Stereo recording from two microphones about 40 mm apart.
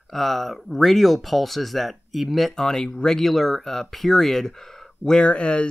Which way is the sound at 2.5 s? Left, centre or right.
Centre.